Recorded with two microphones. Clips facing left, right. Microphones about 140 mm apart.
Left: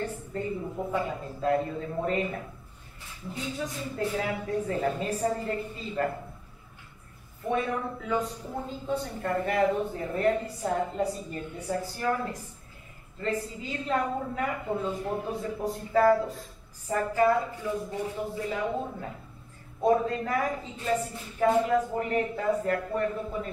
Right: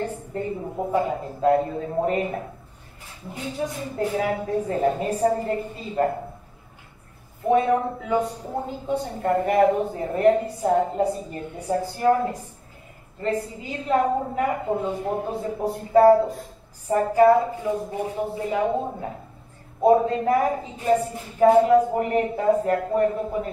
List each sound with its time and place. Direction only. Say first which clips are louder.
0.0 s a woman's voice: right 4 dB; 30° right (ahead or behind)
3.4 s a woman's voice: right 6 dB; 35° right (ahead or behind)
7.4 s a woman's voice: right 9 dB; 35° right (ahead or behind)